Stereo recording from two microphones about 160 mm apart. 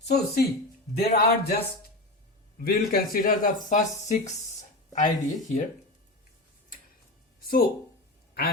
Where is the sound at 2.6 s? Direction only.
65° left (ahead or behind); by 4.3 s 50° left (ahead or behind).